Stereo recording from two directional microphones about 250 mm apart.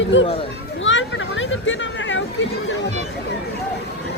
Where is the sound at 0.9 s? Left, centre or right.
Left.